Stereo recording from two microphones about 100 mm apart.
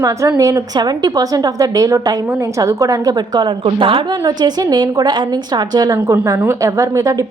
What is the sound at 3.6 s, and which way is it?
Speech, 60° right (ahead or behind).